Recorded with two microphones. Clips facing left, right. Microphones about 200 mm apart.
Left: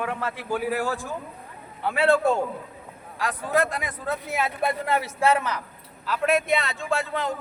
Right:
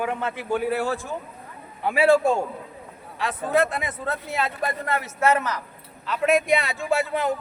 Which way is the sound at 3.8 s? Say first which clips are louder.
Even; centre (ahead or behind).